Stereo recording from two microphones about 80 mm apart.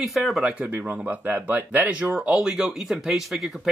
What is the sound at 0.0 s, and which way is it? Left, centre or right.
Speech, centre.